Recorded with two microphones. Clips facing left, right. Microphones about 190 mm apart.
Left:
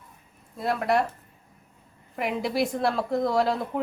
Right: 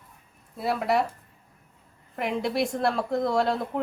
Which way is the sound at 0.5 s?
Centre (ahead or behind).